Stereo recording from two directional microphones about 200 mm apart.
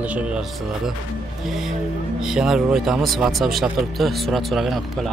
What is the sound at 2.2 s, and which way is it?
Speech, 5° right (ahead or behind).